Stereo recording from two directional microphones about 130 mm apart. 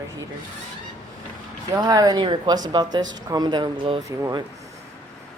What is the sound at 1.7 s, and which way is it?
Speech, 30° right (ahead or behind).